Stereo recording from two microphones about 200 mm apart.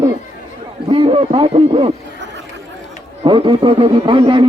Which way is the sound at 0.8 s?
25° right (ahead or behind).